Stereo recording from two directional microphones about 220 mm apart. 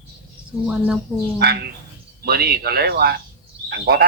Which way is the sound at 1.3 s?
45° right (ahead or behind).